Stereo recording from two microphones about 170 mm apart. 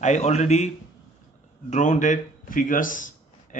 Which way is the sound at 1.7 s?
45° left (ahead or behind).